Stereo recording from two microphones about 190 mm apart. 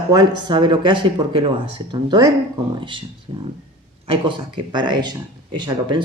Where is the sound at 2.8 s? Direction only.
25° right (ahead or behind).